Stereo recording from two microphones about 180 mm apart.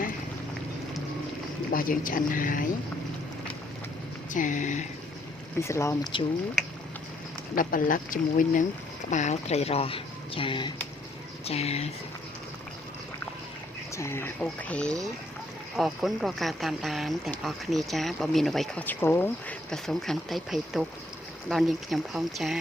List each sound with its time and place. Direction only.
1.7 s speech: 50° left (ahead or behind)
4.3 s speech: 45° left (ahead or behind)
5.5 s speech: 15° left (ahead or behind)
7.5 s speech: 50° left (ahead or behind)
13.9 s speech: 15° left (ahead or behind); by 22.5 s centre (ahead or behind)